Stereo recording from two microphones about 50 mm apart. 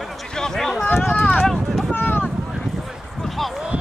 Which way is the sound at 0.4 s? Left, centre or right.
Centre.